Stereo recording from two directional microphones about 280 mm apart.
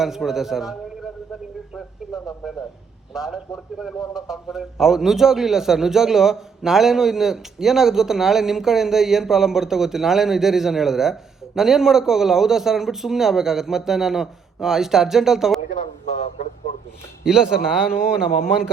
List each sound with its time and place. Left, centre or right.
0.0 s a man's voice: centre
3.1 s a man's voice: centre
15.8 s speech: left
17.2 s a man's voice: centre